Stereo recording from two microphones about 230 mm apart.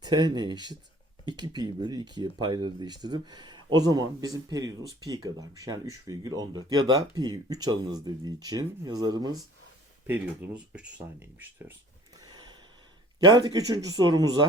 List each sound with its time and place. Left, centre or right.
0.0 s speech: centre
12.2 s a sound: centre
13.1 s speech: centre